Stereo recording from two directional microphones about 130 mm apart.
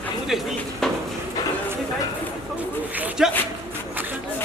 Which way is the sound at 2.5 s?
15° right (ahead or behind).